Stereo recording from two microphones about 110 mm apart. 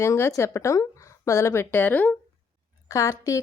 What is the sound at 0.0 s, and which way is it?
A woman's voice, 25° left (ahead or behind).